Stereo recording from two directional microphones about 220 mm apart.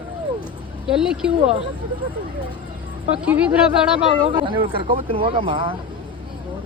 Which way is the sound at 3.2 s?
5° right (ahead or behind).